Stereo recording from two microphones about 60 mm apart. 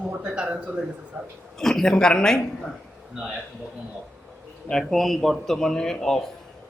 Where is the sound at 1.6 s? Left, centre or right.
Centre.